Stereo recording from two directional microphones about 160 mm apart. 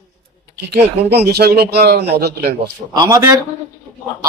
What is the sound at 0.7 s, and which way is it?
Speech, 90° right.